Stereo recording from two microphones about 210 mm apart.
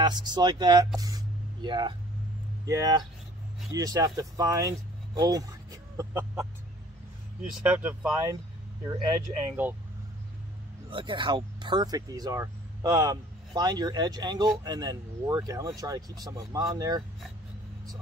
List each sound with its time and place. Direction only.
0.0 s speech: 20° right (ahead or behind)
0.9 s spray: 20° right (ahead or behind)
2.6 s speech: 15° right (ahead or behind)
7.6 s speech: 10° right (ahead or behind)
9.6 s speech: 10° right (ahead or behind)
10.9 s speech: 25° right (ahead or behind)